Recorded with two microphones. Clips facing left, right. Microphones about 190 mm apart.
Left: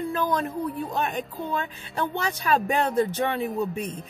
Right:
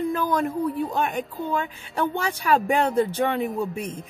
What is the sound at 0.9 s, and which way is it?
Speech, 15° right (ahead or behind).